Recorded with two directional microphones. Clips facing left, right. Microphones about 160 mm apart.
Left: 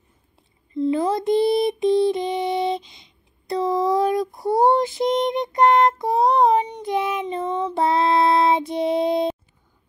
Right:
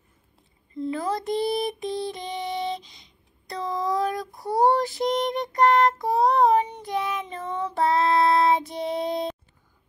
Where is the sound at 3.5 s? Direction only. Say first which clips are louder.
Left 7 dB; 25° left (ahead or behind).